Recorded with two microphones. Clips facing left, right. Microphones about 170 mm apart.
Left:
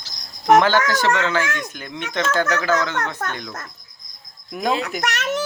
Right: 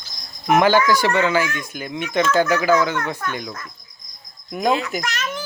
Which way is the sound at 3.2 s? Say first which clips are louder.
Even; 75° left (ahead or behind).